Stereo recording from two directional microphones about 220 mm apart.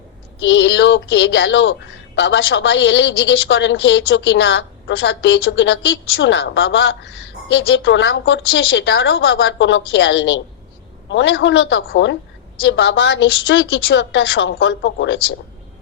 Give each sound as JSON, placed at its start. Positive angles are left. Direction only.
{"t": 0.4, "sound": "a woman's voice", "side_deg": 55}